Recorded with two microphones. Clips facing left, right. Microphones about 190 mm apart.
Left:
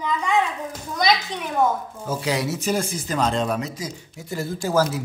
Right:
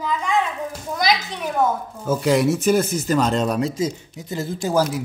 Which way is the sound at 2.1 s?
50° right (ahead or behind).